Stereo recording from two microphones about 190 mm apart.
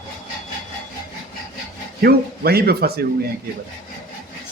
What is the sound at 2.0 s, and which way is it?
A man's voice, 55° right (ahead or behind).